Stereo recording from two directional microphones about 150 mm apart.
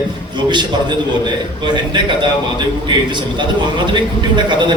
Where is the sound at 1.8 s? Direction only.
30° right (ahead or behind).